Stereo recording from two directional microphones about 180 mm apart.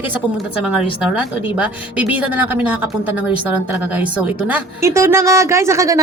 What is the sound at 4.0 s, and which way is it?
A woman's voice, 10° right (ahead or behind).